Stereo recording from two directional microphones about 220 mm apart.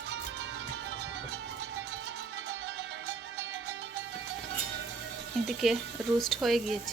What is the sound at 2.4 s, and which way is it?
Music, 55° right (ahead or behind).